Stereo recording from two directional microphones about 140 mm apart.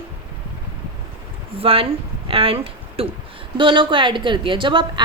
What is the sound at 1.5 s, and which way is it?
Speech, 40° right (ahead or behind).